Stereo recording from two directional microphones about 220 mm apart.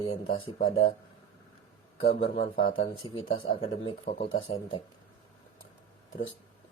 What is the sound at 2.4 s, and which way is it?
Speech, 45° left (ahead or behind).